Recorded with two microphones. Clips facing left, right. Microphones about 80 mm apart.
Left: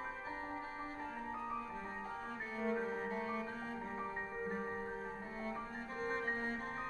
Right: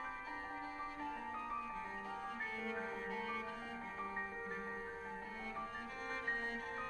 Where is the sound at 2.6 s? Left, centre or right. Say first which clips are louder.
Left 10 dB; left.